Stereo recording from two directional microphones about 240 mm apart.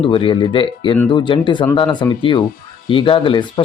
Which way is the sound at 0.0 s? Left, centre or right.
Left.